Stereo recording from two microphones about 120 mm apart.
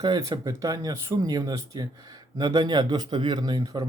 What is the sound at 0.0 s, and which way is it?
Speech, 30° right (ahead or behind).